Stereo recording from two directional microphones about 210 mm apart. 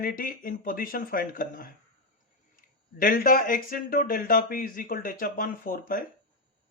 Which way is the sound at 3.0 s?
40° left (ahead or behind).